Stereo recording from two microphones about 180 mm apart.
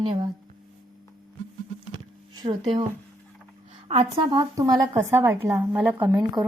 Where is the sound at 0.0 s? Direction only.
25° right (ahead or behind).